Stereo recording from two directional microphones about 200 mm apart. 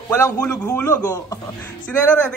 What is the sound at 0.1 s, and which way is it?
Speech, 10° left (ahead or behind).